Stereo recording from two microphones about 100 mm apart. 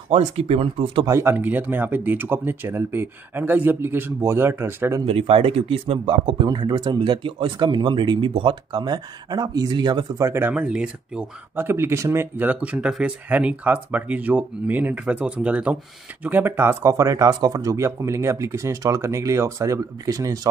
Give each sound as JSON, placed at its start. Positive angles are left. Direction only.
{"t": 0.1, "sound": "speech", "side_deg": -80}
{"t": 1.0, "sound": "speech", "side_deg": -35}
{"t": 1.3, "sound": "speech", "side_deg": -15}
{"t": 5.0, "sound": "speech", "side_deg": -70}
{"t": 10.1, "sound": "speech", "side_deg": -30}
{"t": 10.5, "sound": "speech", "side_deg": -10}
{"t": 11.6, "sound": "speech", "side_deg": -25}